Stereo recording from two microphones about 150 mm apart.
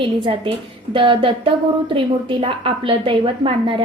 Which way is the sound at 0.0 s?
35° right (ahead or behind).